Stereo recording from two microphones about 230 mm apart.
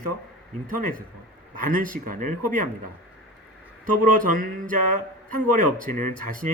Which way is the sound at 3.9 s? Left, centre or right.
Right.